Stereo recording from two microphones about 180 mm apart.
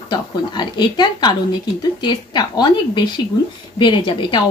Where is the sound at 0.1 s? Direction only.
25° left (ahead or behind).